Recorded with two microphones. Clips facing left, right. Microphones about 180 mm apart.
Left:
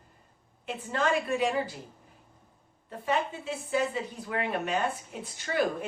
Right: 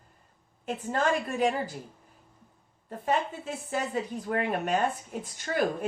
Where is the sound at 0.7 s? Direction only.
45° right (ahead or behind).